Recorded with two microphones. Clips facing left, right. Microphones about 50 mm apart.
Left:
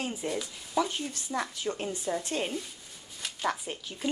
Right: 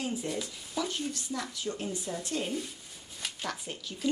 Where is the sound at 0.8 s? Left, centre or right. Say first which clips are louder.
Left 4 dB; left.